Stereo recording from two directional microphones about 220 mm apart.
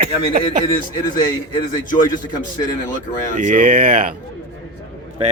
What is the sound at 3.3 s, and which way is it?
Speech, 35° right (ahead or behind).